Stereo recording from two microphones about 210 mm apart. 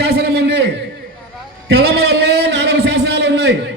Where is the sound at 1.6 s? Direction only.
50° right (ahead or behind).